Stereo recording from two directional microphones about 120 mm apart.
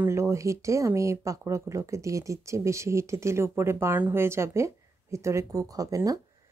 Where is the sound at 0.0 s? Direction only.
25° right (ahead or behind).